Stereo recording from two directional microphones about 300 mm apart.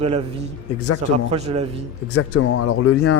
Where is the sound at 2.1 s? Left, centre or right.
Left.